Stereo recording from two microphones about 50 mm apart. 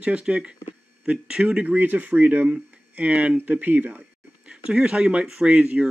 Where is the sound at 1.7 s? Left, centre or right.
Right.